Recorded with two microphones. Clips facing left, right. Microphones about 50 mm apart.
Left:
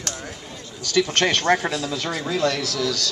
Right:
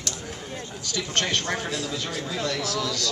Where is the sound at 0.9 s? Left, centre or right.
Left.